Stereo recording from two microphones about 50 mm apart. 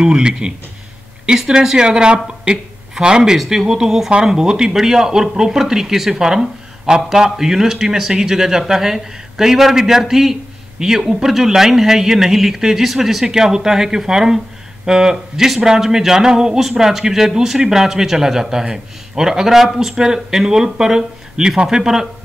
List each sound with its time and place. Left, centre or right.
0.0 s speech: centre
1.5 s speech: centre